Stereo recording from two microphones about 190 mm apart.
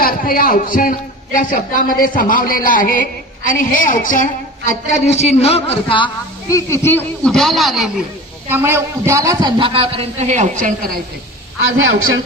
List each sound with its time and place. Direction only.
0.0 s a man's voice: 50° left (ahead or behind); by 8.0 s centre (ahead or behind)
8.5 s a man's voice: 10° right (ahead or behind); by 11.0 s 45° right (ahead or behind)